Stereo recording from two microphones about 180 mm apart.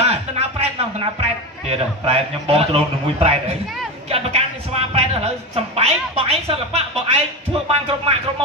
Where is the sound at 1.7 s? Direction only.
30° right (ahead or behind).